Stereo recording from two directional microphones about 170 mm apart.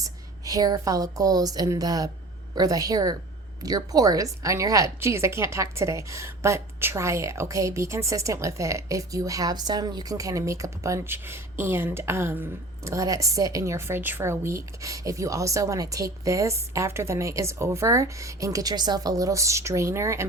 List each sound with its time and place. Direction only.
0.0 s a woman's voice: 20° right (ahead or behind)